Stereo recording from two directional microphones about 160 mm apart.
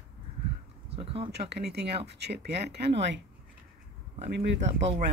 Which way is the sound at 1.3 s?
90° right.